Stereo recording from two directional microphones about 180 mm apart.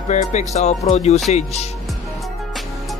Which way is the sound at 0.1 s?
40° left (ahead or behind).